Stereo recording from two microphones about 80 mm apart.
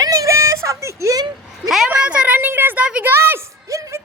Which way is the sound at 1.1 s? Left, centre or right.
Right.